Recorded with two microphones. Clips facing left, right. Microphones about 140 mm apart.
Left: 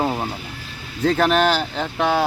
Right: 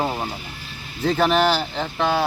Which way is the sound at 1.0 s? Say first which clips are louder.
Left 1 dB; centre (ahead or behind).